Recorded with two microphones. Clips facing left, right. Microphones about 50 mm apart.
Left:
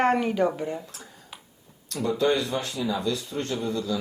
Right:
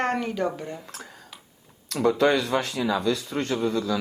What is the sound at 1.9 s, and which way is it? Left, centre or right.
A man's voice, right.